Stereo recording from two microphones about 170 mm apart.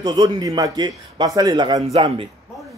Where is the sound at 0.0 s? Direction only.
25° right (ahead or behind).